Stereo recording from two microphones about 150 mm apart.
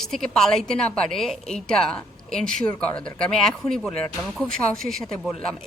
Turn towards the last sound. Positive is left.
turn(degrees=0)  # may be behind; listen again after turning